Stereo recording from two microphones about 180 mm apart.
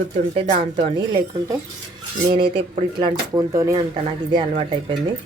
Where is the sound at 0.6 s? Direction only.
30° right (ahead or behind).